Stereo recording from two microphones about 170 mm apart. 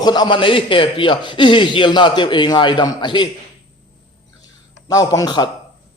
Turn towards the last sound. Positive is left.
turn(degrees=25)  # may be behind; listen again after turning